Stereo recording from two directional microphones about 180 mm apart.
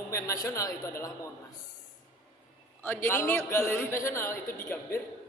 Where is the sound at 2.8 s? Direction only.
15° left (ahead or behind).